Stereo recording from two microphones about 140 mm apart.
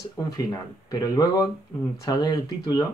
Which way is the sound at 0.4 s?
25° left (ahead or behind).